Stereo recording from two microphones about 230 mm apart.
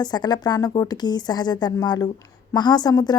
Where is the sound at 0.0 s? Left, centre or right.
Centre.